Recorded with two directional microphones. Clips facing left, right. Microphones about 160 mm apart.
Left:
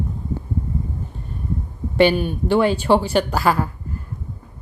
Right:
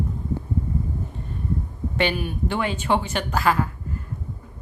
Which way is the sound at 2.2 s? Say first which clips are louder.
Left 8 dB; 35° left (ahead or behind).